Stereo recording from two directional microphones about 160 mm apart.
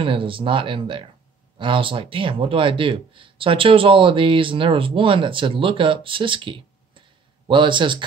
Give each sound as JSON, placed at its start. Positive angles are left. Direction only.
{"t": 0.0, "sound": "speech", "side_deg": -35}